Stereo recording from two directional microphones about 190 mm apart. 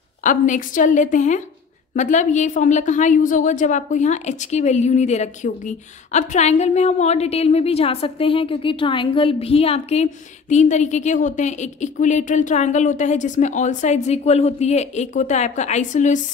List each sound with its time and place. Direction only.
0.2 s a woman's voice: 40° left (ahead or behind)